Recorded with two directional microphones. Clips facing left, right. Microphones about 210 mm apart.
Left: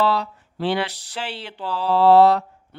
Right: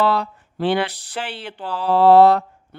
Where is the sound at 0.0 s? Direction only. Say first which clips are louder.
Right 2 dB; 55° right (ahead or behind).